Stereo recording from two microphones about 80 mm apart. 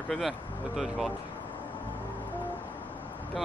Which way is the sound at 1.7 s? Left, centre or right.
Left.